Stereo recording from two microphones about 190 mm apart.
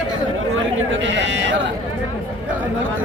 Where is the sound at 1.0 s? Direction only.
70° right (ahead or behind).